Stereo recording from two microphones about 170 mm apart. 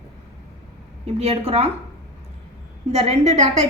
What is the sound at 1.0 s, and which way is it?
Speech, 35° right (ahead or behind).